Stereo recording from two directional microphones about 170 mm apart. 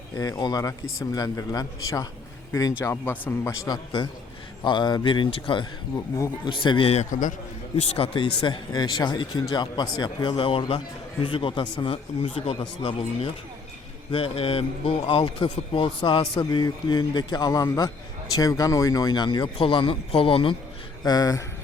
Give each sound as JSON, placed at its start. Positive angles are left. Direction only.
{"t": 0.2, "sound": "speech", "side_deg": 25}
{"t": 3.7, "sound": "a man's voice", "side_deg": 30}
{"t": 7.8, "sound": "a man's voice", "side_deg": 35}